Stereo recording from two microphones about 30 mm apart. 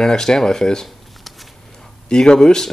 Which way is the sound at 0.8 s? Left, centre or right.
Centre.